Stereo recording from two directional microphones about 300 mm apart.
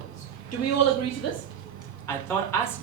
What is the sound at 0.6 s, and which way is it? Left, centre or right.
Speech, left.